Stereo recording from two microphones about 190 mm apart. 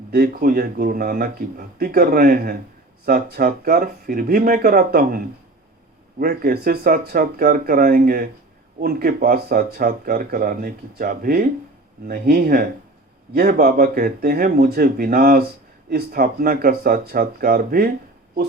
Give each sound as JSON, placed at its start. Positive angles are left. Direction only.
{"t": 0.1, "sound": "speech", "side_deg": -50}